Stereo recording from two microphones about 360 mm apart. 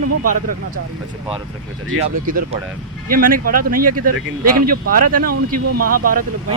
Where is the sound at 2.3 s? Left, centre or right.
Right.